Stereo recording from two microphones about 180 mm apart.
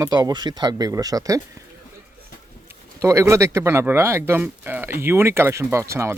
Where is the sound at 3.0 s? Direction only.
15° right (ahead or behind).